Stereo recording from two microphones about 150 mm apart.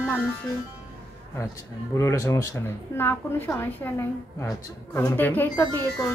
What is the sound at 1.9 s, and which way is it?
Speech, 20° left (ahead or behind).